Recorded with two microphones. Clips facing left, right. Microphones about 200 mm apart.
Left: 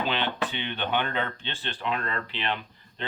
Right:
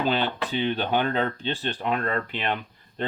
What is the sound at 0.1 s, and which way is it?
Speech, 40° right (ahead or behind).